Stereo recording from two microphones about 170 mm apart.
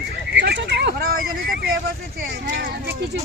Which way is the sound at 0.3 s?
90° right.